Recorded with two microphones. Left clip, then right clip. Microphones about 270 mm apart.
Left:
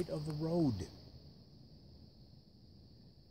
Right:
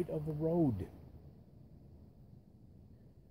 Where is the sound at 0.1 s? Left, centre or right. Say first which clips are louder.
Right 3 dB; left.